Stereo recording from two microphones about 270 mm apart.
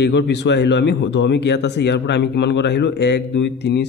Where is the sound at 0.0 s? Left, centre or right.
Left.